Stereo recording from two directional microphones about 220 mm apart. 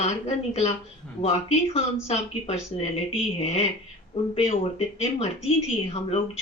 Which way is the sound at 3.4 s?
30° left (ahead or behind).